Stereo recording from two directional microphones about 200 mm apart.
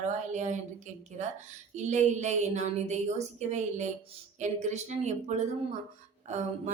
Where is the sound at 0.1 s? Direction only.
35° right (ahead or behind).